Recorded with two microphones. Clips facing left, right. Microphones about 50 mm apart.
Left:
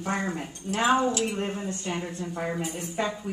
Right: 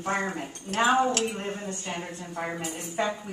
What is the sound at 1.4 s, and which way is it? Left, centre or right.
A woman's voice, centre.